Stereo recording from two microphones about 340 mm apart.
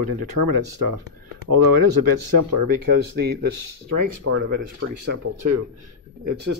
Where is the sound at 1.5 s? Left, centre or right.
Right.